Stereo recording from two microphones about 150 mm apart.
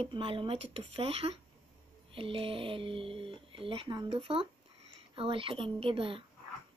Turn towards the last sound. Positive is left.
turn(degrees=-35)  # may be behind; listen again after turning